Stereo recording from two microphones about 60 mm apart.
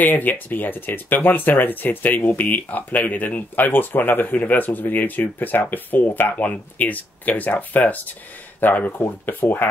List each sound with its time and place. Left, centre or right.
0.0 s speech: left